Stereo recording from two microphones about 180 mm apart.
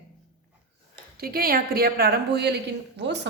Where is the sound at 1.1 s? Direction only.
55° right (ahead or behind).